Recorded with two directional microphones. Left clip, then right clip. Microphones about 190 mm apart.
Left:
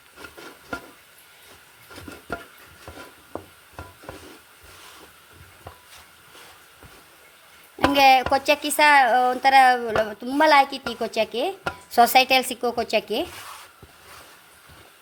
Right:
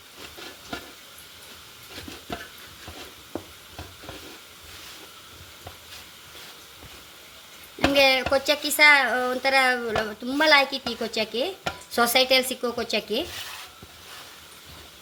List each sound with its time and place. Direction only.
7.9 s speech: 50° left (ahead or behind)